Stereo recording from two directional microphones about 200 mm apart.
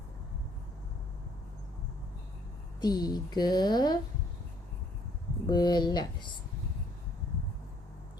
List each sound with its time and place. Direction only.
2.8 s speech: 20° left (ahead or behind)
5.5 s speech: 20° left (ahead or behind)